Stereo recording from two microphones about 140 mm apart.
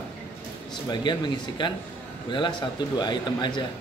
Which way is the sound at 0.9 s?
35° left (ahead or behind).